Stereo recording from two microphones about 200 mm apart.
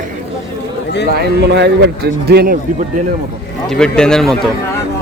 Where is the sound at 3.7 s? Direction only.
5° left (ahead or behind).